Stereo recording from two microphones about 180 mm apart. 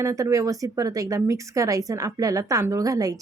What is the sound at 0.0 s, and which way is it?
Speech, 15° right (ahead or behind).